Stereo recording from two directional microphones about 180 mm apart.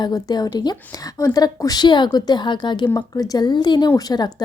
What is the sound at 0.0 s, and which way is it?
A woman's voice, 20° left (ahead or behind).